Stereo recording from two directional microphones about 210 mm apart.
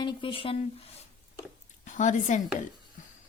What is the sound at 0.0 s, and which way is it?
Speech, 25° left (ahead or behind).